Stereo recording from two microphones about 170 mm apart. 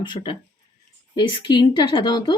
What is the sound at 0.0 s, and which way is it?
A woman's voice, 30° left (ahead or behind).